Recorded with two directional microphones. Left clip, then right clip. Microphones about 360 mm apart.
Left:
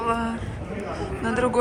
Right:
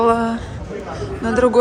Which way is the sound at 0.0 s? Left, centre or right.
Centre.